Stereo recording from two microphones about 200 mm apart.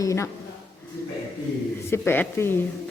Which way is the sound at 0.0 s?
15° left (ahead or behind).